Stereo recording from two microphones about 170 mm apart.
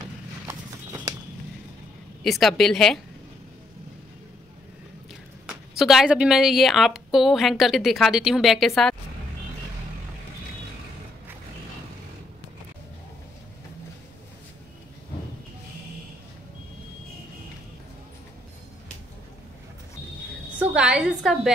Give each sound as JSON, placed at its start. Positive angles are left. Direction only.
{"t": 0.5, "sound": "horse", "side_deg": -20}
{"t": 2.2, "sound": "speech", "side_deg": 0}
{"t": 5.5, "sound": "speech", "side_deg": 0}
{"t": 20.5, "sound": "a sound", "side_deg": -5}